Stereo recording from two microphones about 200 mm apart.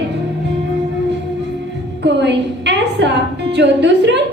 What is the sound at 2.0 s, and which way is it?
A woman's voice, 60° right (ahead or behind).